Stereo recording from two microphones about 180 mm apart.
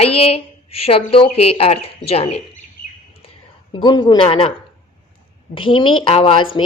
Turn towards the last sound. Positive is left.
turn(degrees=30)  # may be behind; listen again after turning